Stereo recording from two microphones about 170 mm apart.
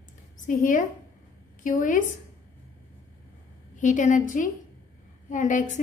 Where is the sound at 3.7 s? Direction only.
45° left (ahead or behind).